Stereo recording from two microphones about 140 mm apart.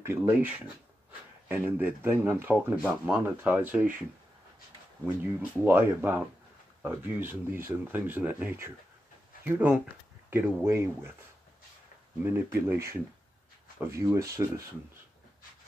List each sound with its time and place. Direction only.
0.0 s speech: 15° right (ahead or behind)
1.5 s speech: 15° right (ahead or behind)
5.0 s speech: 10° right (ahead or behind)
12.2 s speech: 15° right (ahead or behind)